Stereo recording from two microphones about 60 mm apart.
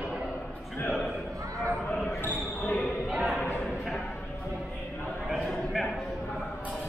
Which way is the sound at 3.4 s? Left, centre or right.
Left.